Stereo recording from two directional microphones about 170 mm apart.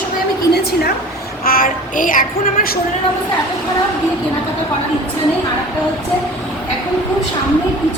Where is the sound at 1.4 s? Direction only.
60° left (ahead or behind).